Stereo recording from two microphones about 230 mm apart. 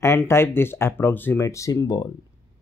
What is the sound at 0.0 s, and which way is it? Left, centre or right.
Speech, centre.